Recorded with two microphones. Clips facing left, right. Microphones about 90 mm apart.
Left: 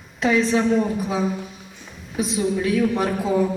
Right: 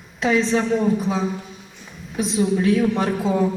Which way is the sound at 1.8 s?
Centre (ahead or behind).